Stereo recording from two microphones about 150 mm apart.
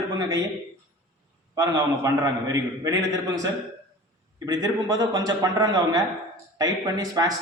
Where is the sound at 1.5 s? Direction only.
20° right (ahead or behind).